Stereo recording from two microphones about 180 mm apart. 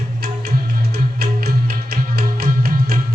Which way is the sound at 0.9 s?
60° right (ahead or behind).